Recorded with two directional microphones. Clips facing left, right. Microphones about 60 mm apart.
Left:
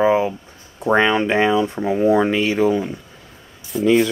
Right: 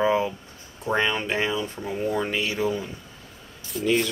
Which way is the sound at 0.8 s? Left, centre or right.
Left.